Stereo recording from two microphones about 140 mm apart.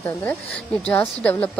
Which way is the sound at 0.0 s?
20° left (ahead or behind).